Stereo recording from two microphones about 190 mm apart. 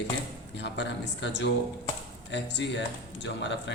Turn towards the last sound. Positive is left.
turn(degrees=70)  # may be behind; listen again after turning